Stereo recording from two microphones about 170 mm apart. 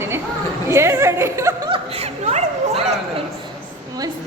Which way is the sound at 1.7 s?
40° right (ahead or behind).